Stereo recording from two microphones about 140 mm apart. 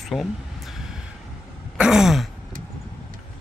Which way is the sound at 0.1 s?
Centre (ahead or behind).